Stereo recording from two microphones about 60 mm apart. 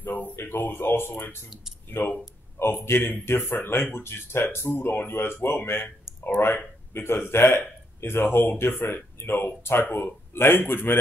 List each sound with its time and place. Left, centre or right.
0.0 s a man's voice: left
9.2 s speech: left